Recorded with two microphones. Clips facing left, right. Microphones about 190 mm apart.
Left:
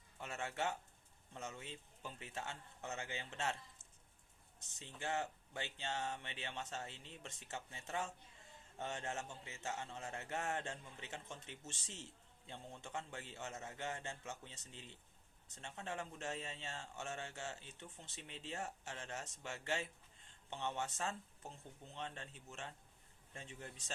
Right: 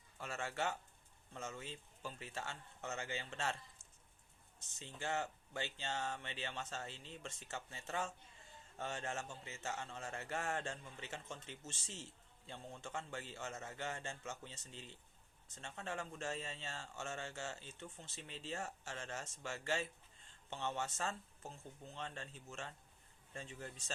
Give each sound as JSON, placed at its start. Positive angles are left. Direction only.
{"t": 0.2, "sound": "speech", "side_deg": 20}
{"t": 4.8, "sound": "speech", "side_deg": 15}